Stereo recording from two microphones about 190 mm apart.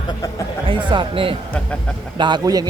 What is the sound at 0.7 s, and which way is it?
Speech, 25° right (ahead or behind).